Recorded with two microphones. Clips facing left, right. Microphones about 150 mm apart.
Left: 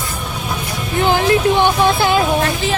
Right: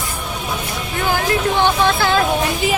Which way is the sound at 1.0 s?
20° left (ahead or behind).